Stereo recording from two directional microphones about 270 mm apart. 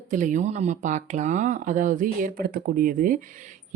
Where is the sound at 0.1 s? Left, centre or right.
Right.